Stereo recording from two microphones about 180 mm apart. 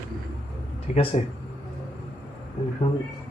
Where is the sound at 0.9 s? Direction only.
40° left (ahead or behind).